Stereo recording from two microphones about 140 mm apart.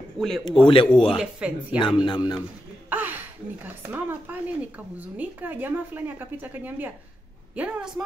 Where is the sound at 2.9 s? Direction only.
15° right (ahead or behind).